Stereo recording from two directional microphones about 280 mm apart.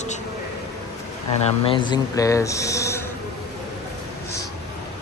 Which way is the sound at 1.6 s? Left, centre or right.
Centre.